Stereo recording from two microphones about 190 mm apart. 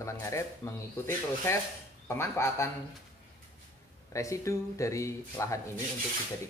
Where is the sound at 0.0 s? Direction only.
15° left (ahead or behind).